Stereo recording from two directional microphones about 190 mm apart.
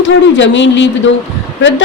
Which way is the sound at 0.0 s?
70° left (ahead or behind).